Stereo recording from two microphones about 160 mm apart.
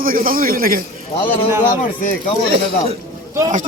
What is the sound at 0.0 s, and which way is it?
Speech, 65° right (ahead or behind).